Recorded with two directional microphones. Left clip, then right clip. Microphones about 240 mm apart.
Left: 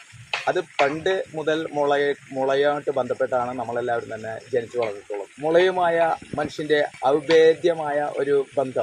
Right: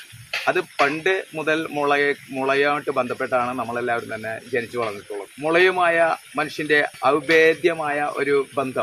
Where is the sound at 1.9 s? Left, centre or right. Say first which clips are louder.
Right 2 dB; centre.